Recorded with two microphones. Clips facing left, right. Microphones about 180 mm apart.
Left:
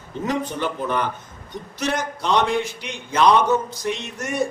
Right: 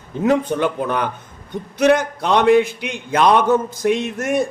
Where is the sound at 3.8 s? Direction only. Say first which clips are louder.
Right 8 dB; 55° right (ahead or behind).